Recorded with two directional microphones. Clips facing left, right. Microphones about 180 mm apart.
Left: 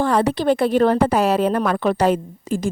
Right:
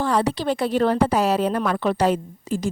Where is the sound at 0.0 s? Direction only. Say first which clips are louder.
Left 4 dB; 55° left (ahead or behind).